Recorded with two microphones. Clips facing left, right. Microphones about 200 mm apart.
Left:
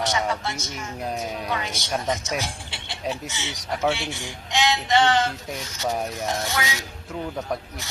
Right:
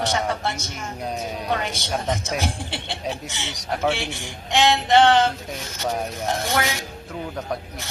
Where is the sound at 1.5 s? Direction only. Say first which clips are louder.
Right 3 dB; 55° right (ahead or behind).